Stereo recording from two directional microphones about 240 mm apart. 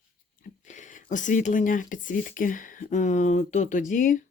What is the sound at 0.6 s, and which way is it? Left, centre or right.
Speech, left.